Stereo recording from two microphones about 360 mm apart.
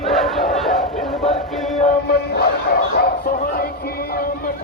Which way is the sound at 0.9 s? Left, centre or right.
Centre.